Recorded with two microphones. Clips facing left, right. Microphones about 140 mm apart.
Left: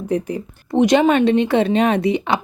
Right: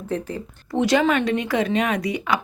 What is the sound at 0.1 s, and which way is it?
A woman's voice, 15° left (ahead or behind).